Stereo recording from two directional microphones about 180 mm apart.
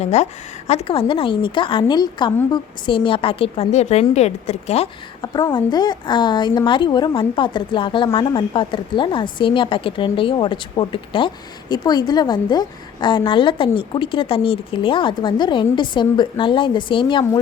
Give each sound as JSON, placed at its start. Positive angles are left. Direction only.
{"t": 0.0, "sound": "a woman's voice", "side_deg": 40}
{"t": 5.3, "sound": "a woman's voice", "side_deg": 25}